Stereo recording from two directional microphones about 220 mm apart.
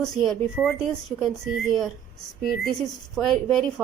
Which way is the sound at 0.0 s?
Centre (ahead or behind).